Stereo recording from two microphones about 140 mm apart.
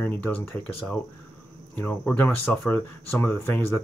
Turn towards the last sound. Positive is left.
turn(degrees=15)  # may be behind; listen again after turning